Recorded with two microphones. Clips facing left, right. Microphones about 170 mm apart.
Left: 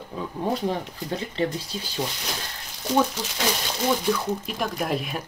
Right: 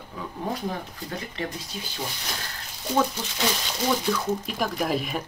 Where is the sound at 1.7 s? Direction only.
30° left (ahead or behind).